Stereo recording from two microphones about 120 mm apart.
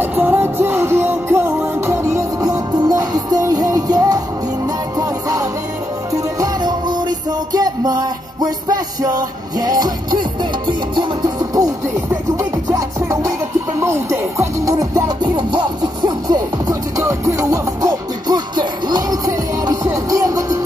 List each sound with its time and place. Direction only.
0.0 s music: 15° right (ahead or behind)
15.3 s music: 40° right (ahead or behind)
17.0 s music: 25° right (ahead or behind)